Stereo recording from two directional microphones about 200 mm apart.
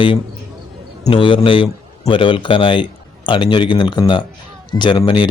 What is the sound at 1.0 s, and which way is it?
Speech, 25° left (ahead or behind).